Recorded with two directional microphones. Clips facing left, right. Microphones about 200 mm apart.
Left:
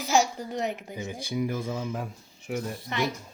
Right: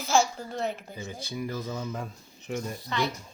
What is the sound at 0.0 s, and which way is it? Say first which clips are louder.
Speech: left 1 dB; 15° left (ahead or behind).